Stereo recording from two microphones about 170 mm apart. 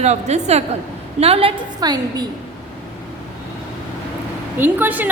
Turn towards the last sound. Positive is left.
turn(degrees=-10)  # may be behind; listen again after turning